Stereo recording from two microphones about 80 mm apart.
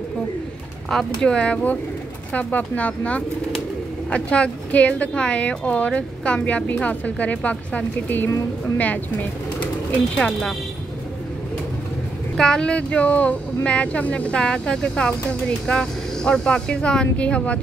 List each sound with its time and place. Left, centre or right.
0.8 s speech: centre
9.6 s bird: centre
12.4 s speech: centre